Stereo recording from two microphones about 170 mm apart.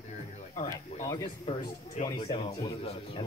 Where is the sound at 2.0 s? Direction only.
40° left (ahead or behind).